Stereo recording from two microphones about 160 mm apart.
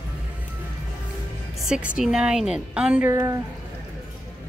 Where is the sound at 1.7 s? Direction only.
5° right (ahead or behind).